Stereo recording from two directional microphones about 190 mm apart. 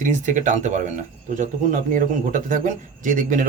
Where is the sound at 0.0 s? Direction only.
40° right (ahead or behind).